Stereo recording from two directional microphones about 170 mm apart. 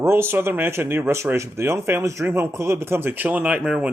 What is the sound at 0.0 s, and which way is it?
Speech, 15° right (ahead or behind).